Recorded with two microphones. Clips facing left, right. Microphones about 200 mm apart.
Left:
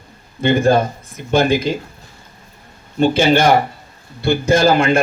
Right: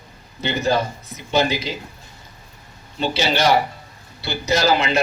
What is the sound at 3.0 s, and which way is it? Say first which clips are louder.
A man's voice: left 8 dB; 50° left (ahead or behind).